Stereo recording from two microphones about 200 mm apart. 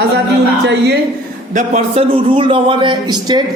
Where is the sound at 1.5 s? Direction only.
35° right (ahead or behind).